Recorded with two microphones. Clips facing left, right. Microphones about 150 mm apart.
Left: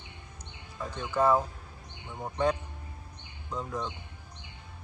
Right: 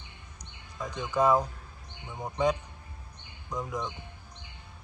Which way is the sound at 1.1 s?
15° right (ahead or behind).